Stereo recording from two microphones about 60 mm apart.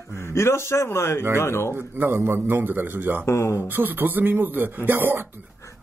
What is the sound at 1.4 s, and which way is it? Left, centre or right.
Speech, left.